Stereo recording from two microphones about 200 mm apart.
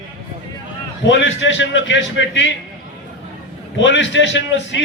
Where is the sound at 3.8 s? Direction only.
65° left (ahead or behind).